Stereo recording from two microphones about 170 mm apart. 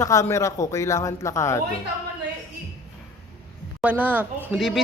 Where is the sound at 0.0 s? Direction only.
20° left (ahead or behind).